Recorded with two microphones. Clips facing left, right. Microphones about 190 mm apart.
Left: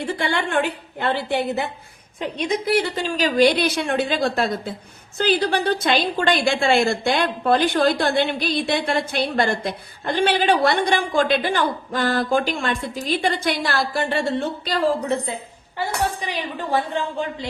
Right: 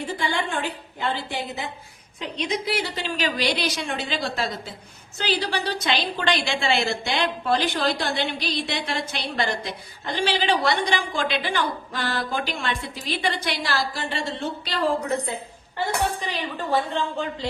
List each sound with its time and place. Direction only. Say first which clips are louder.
0.0 s a woman's voice: left 3 dB; 65° left (ahead or behind)
2.2 s a woman's voice: left 4 dB; 50° left (ahead or behind)
16.2 s speech: left 2 dB; 15° left (ahead or behind)